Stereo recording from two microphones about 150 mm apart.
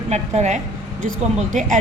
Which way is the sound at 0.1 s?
50° right (ahead or behind).